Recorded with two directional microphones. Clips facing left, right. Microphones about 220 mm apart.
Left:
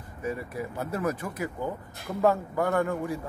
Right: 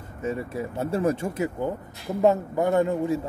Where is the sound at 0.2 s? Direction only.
25° right (ahead or behind).